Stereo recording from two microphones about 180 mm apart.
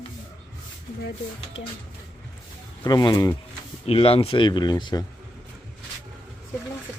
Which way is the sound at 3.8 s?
35° left (ahead or behind).